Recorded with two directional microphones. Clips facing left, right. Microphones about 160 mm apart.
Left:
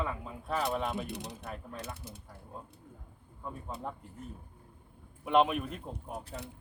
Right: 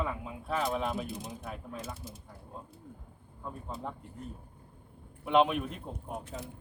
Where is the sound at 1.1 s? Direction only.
70° left (ahead or behind).